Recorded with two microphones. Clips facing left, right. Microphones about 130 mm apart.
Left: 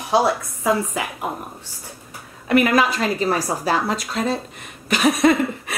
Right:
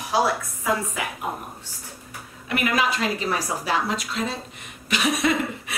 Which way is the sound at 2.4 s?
45° left (ahead or behind).